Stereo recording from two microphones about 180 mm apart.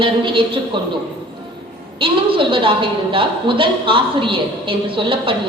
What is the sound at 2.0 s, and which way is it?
A woman's voice, 30° right (ahead or behind).